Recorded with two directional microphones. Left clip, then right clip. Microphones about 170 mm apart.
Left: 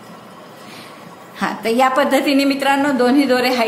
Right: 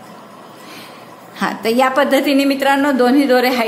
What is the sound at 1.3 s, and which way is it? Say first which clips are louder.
A woman's voice: right 1 dB; 20° right (ahead or behind).